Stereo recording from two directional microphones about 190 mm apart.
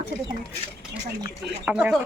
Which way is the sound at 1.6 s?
5° right (ahead or behind).